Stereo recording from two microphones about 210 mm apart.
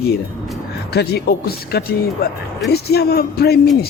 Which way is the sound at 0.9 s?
50° left (ahead or behind).